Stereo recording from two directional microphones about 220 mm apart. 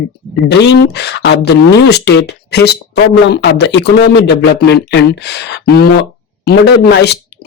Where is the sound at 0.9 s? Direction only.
50° left (ahead or behind).